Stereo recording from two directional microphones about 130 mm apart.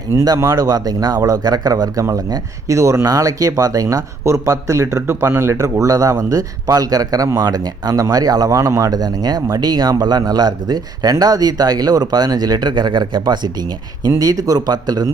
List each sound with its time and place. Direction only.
0.1 s speech: 20° right (ahead or behind)